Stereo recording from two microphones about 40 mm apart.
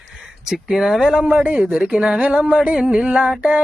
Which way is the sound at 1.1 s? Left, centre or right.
Right.